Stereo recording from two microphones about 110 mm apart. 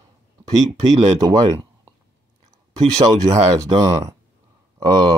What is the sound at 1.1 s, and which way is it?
Speech, 35° right (ahead or behind).